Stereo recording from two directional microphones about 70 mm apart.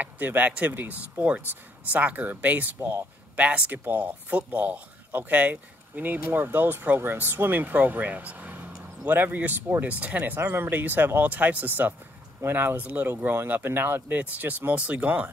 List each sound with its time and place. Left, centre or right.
0.0 s speech: right
10.3 s speech: right